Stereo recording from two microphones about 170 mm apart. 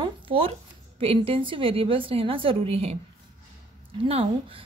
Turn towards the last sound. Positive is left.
turn(degrees=-35)  # may be behind; listen again after turning